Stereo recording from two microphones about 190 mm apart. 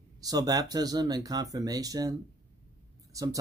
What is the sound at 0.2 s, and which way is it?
Speech, 20° right (ahead or behind).